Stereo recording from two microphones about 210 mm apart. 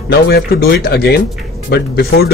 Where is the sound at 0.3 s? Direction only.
50° left (ahead or behind).